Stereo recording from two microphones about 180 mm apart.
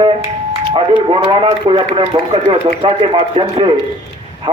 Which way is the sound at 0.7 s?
25° right (ahead or behind).